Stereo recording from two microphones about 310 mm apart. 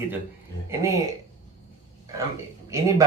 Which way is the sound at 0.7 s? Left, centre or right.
Centre.